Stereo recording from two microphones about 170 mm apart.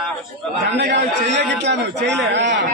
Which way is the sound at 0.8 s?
90° right.